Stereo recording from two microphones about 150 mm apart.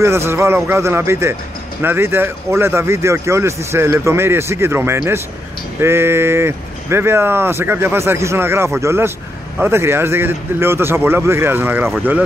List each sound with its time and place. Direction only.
0.0 s speech: 15° right (ahead or behind)